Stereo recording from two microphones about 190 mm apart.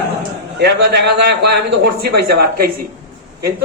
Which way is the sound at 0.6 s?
60° right (ahead or behind).